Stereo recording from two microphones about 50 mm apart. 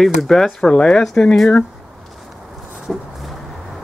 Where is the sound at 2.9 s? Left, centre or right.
Centre.